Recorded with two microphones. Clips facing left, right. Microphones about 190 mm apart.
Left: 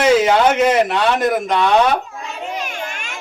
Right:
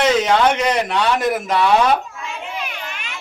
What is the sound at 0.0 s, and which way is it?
Speech, 5° left (ahead or behind).